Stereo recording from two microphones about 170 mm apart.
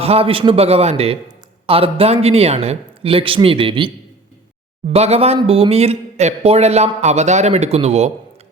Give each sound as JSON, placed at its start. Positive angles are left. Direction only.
{"t": 0.0, "sound": "a man's voice", "side_deg": -35}